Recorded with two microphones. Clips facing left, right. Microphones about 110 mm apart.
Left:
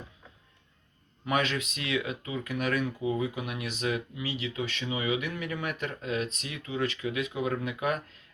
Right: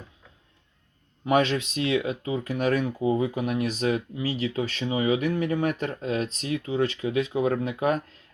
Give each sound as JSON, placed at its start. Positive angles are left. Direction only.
{"t": 1.2, "sound": "speech", "side_deg": -30}